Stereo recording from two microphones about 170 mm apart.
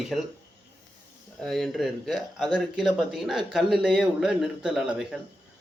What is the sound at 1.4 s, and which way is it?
Speech, centre (ahead or behind).